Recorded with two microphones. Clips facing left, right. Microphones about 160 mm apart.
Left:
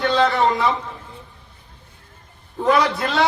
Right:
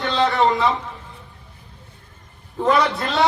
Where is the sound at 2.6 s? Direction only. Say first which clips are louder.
Left 1 dB; centre (ahead or behind).